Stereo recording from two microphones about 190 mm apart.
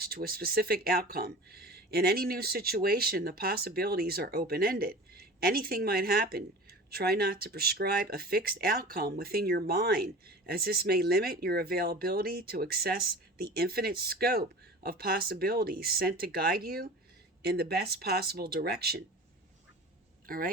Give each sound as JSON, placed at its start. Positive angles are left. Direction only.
{"t": 0.0, "sound": "speech", "side_deg": -50}
{"t": 20.2, "sound": "speech", "side_deg": -50}